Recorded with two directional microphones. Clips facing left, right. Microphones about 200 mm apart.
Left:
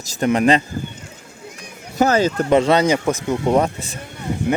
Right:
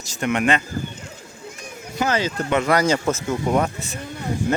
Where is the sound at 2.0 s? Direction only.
40° left (ahead or behind).